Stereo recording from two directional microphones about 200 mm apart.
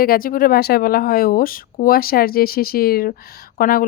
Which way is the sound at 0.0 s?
45° left (ahead or behind).